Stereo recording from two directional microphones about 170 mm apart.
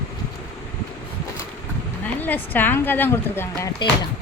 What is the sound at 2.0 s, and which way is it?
Speech, 10° left (ahead or behind).